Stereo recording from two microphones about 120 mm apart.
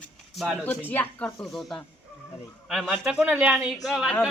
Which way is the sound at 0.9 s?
15° left (ahead or behind).